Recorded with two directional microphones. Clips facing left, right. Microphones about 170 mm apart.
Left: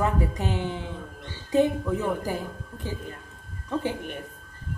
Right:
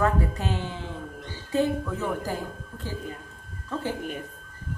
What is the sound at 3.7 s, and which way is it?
Speech, 15° left (ahead or behind).